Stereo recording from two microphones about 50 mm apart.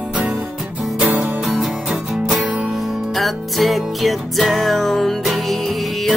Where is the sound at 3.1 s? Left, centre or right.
Centre.